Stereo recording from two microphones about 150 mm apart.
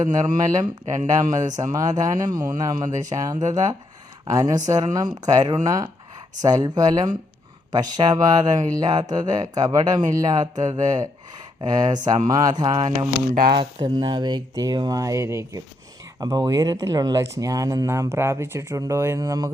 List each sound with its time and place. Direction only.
0.0 s speech: 25° right (ahead or behind)
13.3 s speech: 75° right (ahead or behind)
13.6 s speech: 30° right (ahead or behind)